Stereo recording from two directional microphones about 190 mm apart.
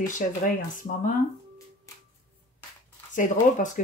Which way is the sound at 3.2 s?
45° left (ahead or behind).